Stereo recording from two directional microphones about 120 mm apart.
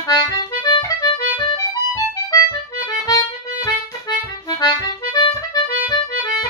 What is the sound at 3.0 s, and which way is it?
Music, 30° left (ahead or behind).